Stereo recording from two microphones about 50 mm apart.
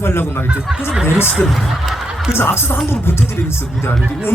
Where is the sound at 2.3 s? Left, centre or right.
Left.